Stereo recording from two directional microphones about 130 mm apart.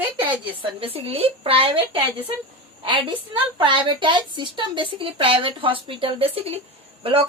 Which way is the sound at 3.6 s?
40° right (ahead or behind).